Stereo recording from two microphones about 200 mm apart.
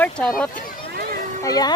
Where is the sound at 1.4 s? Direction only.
20° left (ahead or behind).